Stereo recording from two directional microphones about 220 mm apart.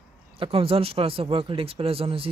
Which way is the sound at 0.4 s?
25° right (ahead or behind).